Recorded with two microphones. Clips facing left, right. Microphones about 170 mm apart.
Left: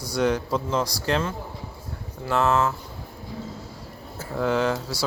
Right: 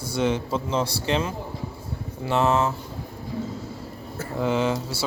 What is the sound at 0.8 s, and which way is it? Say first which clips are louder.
Speech: right 1 dB; 25° right (ahead or behind).